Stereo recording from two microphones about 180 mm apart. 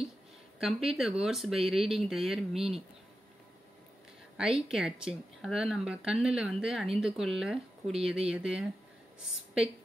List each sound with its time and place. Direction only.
0.6 s speech: centre (ahead or behind)
4.4 s speech: 5° right (ahead or behind)